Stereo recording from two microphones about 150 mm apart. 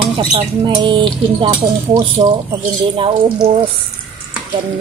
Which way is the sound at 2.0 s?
30° right (ahead or behind).